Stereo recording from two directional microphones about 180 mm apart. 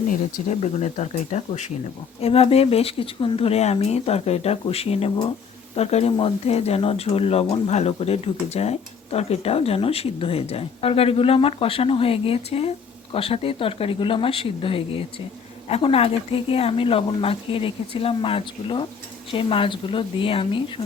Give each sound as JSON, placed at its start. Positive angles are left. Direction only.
{"t": 0.1, "sound": "speech", "side_deg": 40}